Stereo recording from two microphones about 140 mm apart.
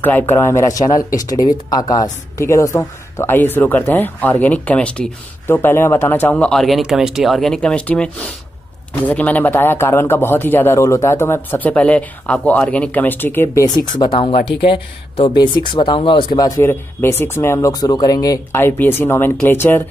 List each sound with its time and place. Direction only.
0.0 s a woman's voice: 15° left (ahead or behind); by 16.3 s 35° left (ahead or behind)
16.3 s a woman's voice: 25° left (ahead or behind)